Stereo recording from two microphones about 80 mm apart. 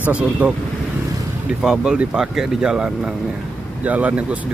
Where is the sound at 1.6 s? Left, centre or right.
Centre.